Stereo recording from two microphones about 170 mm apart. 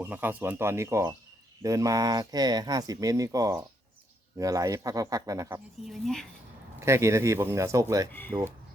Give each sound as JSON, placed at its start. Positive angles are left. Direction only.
{"t": 0.0, "sound": "speech", "side_deg": -10}
{"t": 5.9, "sound": "speech", "side_deg": 5}
{"t": 6.7, "sound": "speech", "side_deg": -15}
{"t": 8.1, "sound": "speech", "side_deg": 10}